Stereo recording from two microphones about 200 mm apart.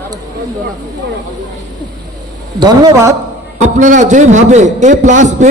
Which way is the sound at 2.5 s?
20° right (ahead or behind).